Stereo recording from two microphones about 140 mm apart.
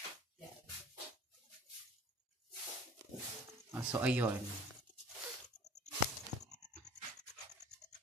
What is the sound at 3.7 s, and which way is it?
Speech, 10° right (ahead or behind).